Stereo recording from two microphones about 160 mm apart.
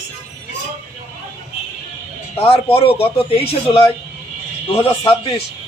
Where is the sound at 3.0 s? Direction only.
40° left (ahead or behind).